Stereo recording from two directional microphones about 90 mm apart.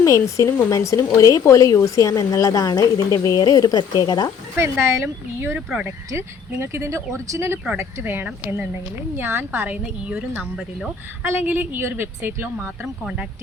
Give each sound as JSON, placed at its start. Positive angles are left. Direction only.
{"t": 0.0, "sound": "speech", "side_deg": 40}
{"t": 4.5, "sound": "speech", "side_deg": -25}
{"t": 5.5, "sound": "a woman's voice", "side_deg": -10}
{"t": 6.1, "sound": "speech", "side_deg": -30}
{"t": 9.6, "sound": "a woman's voice", "side_deg": -15}
{"t": 12.8, "sound": "speech", "side_deg": -5}